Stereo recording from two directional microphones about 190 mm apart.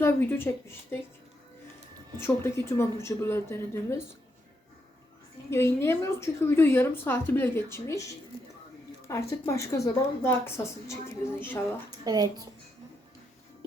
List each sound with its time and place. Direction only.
0.0 s a woman's voice: 10° left (ahead or behind)
2.2 s a woman's voice: 15° left (ahead or behind)
5.5 s a woman's voice: 15° left (ahead or behind)
9.3 s a woman's voice: 15° left (ahead or behind)
11.9 s speech: 20° right (ahead or behind)